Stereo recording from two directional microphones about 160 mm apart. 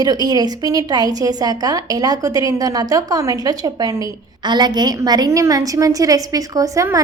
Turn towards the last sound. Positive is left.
turn(degrees=-20)  # may be behind; listen again after turning